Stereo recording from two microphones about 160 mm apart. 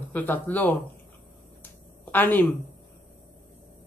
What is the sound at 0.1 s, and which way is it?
Speech, 10° left (ahead or behind).